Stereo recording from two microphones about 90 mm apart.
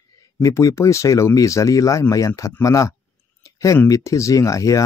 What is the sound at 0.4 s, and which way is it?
Speech, 35° left (ahead or behind).